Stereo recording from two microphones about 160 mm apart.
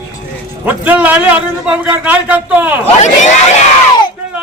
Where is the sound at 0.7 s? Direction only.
10° right (ahead or behind).